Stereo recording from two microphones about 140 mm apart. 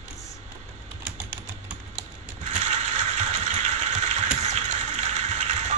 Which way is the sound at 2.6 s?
60° right (ahead or behind).